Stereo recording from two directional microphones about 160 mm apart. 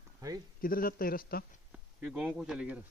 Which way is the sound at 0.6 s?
65° left (ahead or behind).